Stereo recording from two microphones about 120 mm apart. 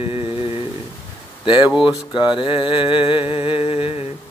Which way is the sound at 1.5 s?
40° left (ahead or behind).